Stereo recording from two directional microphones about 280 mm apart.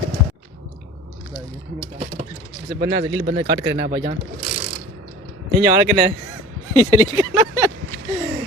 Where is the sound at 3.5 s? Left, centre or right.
Centre.